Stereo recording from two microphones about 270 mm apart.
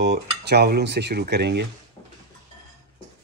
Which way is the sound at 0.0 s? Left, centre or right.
Right.